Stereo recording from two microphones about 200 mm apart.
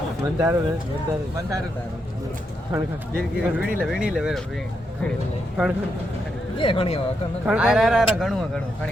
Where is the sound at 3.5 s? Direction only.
5° right (ahead or behind).